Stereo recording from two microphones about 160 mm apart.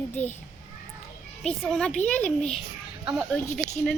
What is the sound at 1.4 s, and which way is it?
A child's voice, 5° left (ahead or behind).